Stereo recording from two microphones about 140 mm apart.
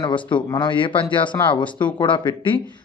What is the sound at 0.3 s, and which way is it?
Speech, 35° left (ahead or behind).